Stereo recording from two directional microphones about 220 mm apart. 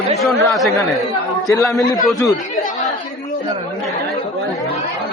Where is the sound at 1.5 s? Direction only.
15° left (ahead or behind).